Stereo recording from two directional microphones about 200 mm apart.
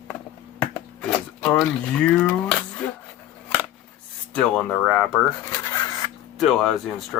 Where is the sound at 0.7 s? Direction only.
10° left (ahead or behind).